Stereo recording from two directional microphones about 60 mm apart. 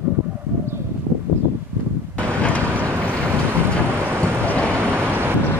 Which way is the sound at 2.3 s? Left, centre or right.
Left.